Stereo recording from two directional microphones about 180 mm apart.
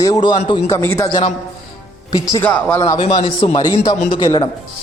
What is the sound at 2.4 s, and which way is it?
A man's voice, 10° left (ahead or behind).